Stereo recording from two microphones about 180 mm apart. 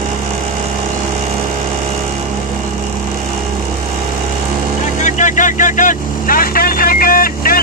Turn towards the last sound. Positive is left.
turn(degrees=55)  # may be behind; listen again after turning